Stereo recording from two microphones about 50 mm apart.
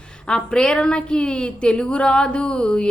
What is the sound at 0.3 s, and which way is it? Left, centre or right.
Speech, centre.